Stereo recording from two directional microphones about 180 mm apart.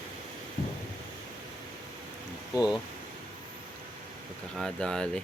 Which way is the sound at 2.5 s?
5° right (ahead or behind).